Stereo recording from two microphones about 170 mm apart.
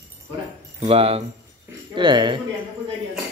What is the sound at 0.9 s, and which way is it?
Speech, 35° right (ahead or behind).